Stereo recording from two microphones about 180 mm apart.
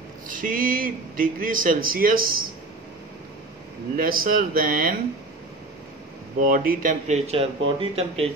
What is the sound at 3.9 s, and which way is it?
Speech, 50° right (ahead or behind).